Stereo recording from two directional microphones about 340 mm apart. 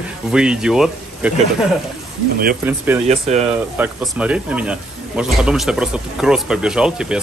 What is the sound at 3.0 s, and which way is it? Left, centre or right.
Speech, centre.